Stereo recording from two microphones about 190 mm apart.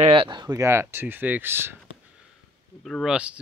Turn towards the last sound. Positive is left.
turn(degrees=-5)  # may be behind; listen again after turning